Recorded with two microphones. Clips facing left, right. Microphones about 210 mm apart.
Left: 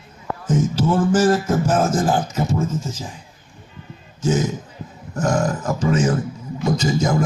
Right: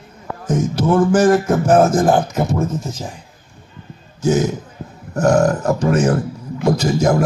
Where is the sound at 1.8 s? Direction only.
40° right (ahead or behind).